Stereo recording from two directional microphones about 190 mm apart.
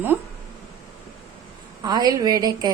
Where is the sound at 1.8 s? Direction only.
20° right (ahead or behind).